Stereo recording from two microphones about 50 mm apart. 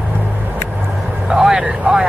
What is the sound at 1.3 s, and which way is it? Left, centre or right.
Vehicle, centre.